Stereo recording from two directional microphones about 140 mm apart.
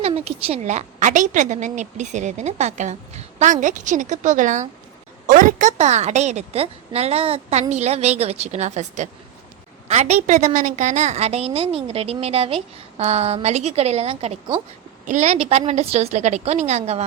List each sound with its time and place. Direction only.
0.0 s a woman's voice: 45° right (ahead or behind)